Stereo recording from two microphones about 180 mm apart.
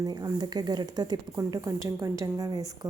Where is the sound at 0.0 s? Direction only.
20° right (ahead or behind).